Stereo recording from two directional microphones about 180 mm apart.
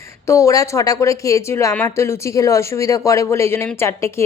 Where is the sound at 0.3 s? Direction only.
15° left (ahead or behind).